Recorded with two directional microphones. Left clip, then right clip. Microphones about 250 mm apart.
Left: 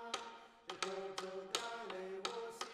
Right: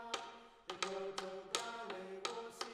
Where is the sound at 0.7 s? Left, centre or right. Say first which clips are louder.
Right 1 dB; centre.